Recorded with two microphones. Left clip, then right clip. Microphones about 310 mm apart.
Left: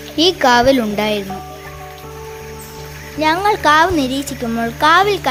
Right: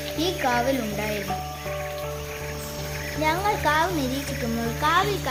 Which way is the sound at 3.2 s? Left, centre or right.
Left.